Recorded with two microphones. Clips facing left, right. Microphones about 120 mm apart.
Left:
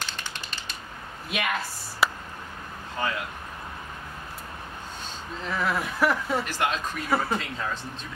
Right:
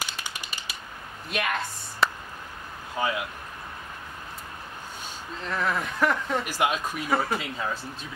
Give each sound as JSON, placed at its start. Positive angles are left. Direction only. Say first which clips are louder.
{"t": 0.0, "sound": "typing", "louder": "even", "side_deg": -10}
{"t": 1.3, "sound": "a woman's voice", "louder": "even", "side_deg": 0}
{"t": 3.0, "sound": "speech", "louder": "right 2 dB", "side_deg": -10}
{"t": 5.5, "sound": "speech", "louder": "even", "side_deg": 5}
{"t": 6.4, "sound": "speech", "louder": "right 1 dB", "side_deg": -10}